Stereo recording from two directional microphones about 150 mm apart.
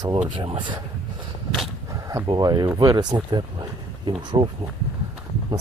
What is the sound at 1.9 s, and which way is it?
Speech, 20° right (ahead or behind).